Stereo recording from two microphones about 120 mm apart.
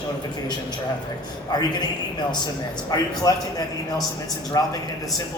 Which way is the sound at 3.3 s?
30° left (ahead or behind).